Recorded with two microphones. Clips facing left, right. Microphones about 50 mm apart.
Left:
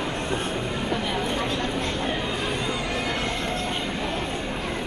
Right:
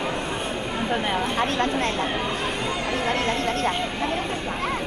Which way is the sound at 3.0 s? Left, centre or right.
Right.